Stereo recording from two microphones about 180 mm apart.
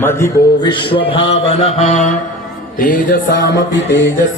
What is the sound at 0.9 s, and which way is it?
Mantra, 30° left (ahead or behind).